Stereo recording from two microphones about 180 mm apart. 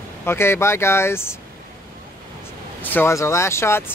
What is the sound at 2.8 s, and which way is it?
Speech, 10° left (ahead or behind).